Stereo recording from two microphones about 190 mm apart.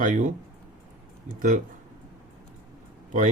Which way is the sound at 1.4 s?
45° right (ahead or behind).